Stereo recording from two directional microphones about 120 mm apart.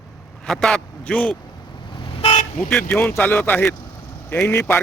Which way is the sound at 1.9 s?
45° left (ahead or behind).